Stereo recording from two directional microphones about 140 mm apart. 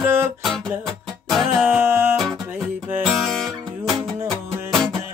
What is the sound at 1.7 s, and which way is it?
Music, 15° right (ahead or behind).